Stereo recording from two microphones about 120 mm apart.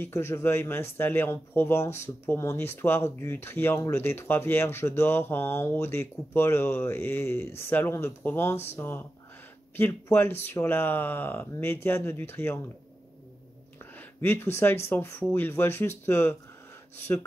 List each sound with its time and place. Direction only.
0.0 s speech: 20° left (ahead or behind)
13.9 s speech: 20° left (ahead or behind)